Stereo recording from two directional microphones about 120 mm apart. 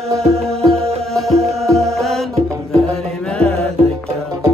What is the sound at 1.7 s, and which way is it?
Music, centre (ahead or behind).